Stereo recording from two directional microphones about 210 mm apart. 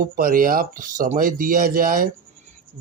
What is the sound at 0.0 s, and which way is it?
Speech, 40° right (ahead or behind).